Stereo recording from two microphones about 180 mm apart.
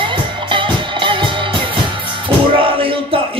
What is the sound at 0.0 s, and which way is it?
Music, 25° right (ahead or behind).